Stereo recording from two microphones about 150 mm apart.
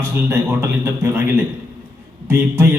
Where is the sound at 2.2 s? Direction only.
15° right (ahead or behind).